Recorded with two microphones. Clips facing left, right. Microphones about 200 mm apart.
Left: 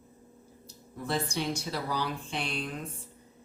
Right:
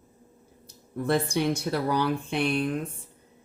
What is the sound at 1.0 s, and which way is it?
Speech, 55° right (ahead or behind).